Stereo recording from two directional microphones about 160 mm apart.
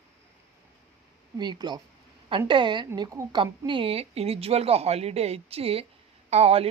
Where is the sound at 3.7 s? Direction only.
35° right (ahead or behind).